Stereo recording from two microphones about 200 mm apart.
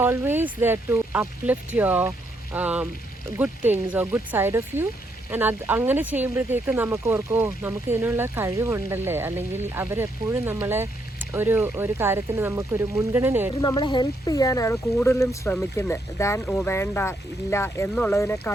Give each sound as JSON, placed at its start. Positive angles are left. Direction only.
{"t": 0.0, "sound": "speech", "side_deg": -10}
{"t": 13.6, "sound": "speech", "side_deg": 20}